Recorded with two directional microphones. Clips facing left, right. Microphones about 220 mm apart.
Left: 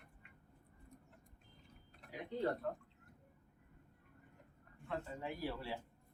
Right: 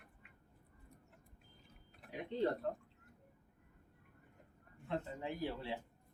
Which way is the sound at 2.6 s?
25° right (ahead or behind).